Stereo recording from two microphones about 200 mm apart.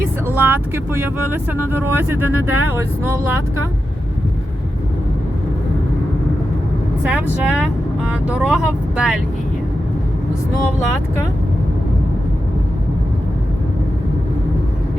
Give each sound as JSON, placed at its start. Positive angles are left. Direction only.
{"t": 0.3, "sound": "speech", "side_deg": -10}
{"t": 2.3, "sound": "speech", "side_deg": -90}
{"t": 2.7, "sound": "speech", "side_deg": -10}
{"t": 7.1, "sound": "speech", "side_deg": -5}